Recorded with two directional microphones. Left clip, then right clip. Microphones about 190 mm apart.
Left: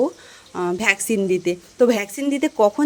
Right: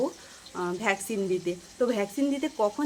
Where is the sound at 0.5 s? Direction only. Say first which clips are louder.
Left 8 dB; 45° left (ahead or behind).